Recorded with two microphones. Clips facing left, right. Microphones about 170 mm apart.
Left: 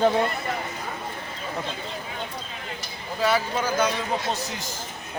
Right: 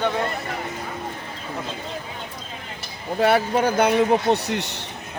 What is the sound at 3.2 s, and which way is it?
A man's voice, 60° right (ahead or behind).